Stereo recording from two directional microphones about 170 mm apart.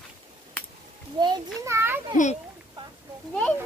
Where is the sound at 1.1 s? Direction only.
25° right (ahead or behind).